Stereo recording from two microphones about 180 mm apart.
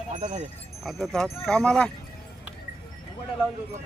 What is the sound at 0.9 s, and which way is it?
Speech, centre (ahead or behind).